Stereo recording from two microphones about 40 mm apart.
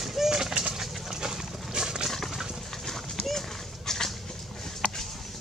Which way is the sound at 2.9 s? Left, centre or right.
Centre.